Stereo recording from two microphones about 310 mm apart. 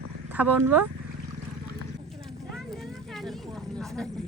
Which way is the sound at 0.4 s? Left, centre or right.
Right.